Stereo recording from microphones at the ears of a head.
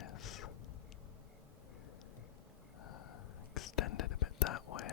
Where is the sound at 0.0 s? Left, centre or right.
Left.